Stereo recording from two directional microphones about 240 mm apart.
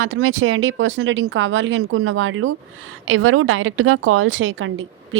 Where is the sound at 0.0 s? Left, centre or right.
Right.